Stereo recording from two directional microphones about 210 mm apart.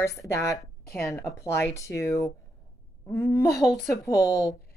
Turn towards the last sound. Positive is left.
turn(degrees=15)  # may be behind; listen again after turning